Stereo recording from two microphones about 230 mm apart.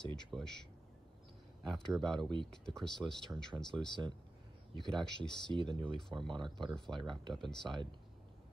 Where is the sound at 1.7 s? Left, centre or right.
Centre.